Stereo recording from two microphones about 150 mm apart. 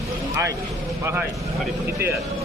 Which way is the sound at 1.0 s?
15° right (ahead or behind).